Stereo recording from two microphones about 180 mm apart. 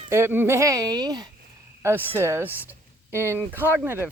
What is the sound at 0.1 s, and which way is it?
Speech, 10° right (ahead or behind).